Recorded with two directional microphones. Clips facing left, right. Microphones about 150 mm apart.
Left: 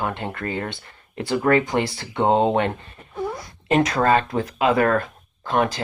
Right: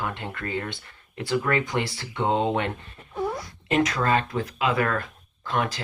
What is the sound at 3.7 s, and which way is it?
Speech, 40° left (ahead or behind).